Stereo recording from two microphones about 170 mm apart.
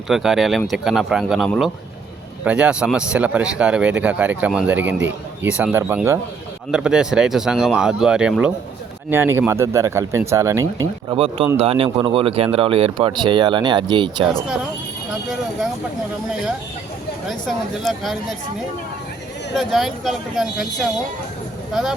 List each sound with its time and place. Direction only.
0.1 s speech: centre (ahead or behind); by 11.2 s 20° right (ahead or behind)
11.2 s speech: 35° right (ahead or behind)
17.2 s speech: centre (ahead or behind)
19.5 s speech: centre (ahead or behind)